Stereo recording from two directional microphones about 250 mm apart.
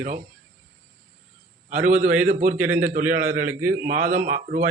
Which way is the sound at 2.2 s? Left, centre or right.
Right.